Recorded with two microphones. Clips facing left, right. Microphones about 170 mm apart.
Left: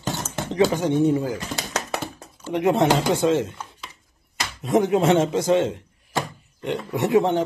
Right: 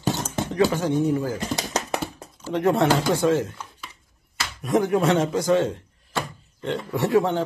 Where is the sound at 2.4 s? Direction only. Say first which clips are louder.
Left 1 dB; 15° left (ahead or behind).